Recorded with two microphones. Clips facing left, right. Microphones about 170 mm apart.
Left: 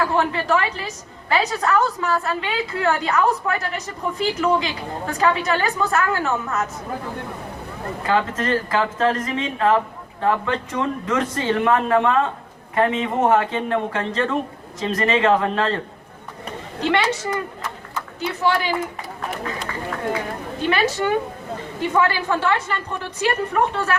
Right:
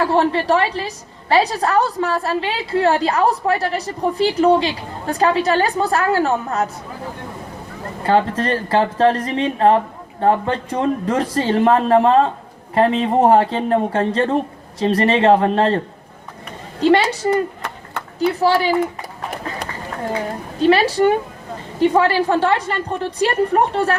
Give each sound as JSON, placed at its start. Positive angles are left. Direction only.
{"t": 0.0, "sound": "a woman's voice", "side_deg": -35}
{"t": 8.0, "sound": "a woman's voice", "side_deg": -35}
{"t": 16.8, "sound": "a woman's voice", "side_deg": -35}
{"t": 20.6, "sound": "a woman's voice", "side_deg": -35}